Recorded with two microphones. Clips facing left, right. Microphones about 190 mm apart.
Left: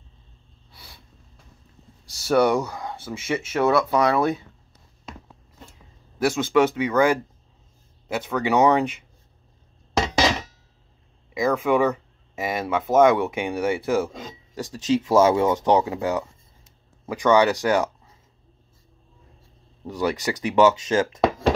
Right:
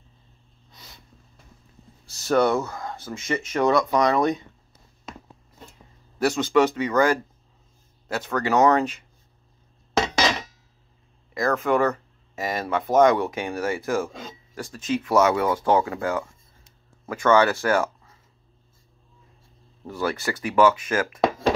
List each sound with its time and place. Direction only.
0.7 s snort: 10° left (ahead or behind)
2.1 s speech: 10° left (ahead or behind)
6.1 s speech: 10° left (ahead or behind)
11.3 s speech: 10° left (ahead or behind)
19.9 s speech: 15° left (ahead or behind)